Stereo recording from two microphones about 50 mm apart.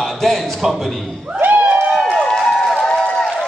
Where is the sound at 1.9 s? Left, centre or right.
Centre.